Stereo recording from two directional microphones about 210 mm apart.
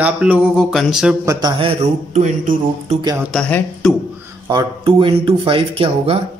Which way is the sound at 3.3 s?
5° left (ahead or behind).